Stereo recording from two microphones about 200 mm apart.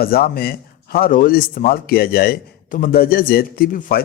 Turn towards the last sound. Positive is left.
turn(degrees=45)  # may be behind; listen again after turning